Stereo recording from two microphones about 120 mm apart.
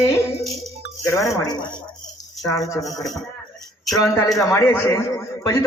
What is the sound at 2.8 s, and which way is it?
Speech, centre (ahead or behind).